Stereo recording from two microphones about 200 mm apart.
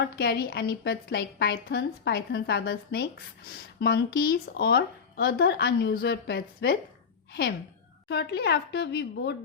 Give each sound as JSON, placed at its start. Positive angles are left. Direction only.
{"t": 0.0, "sound": "a woman's voice", "side_deg": 55}
{"t": 8.1, "sound": "speech", "side_deg": 55}